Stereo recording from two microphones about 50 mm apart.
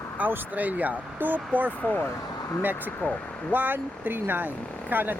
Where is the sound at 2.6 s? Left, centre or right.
Right.